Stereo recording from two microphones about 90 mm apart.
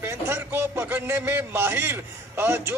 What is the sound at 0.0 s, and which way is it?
Speech, 25° right (ahead or behind).